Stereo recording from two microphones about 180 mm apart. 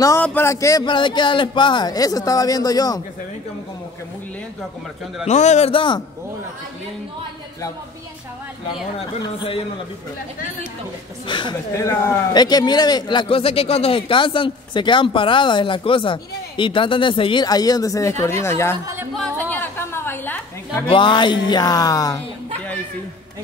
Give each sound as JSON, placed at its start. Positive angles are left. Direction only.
{"t": 0.0, "sound": "a man's voice", "side_deg": 10}
{"t": 5.2, "sound": "a man's voice", "side_deg": 40}
{"t": 9.2, "sound": "a man's voice", "side_deg": 25}
{"t": 11.2, "sound": "a man's voice", "side_deg": 25}
{"t": 11.7, "sound": "a man's voice", "side_deg": 15}
{"t": 20.8, "sound": "a man's voice", "side_deg": 30}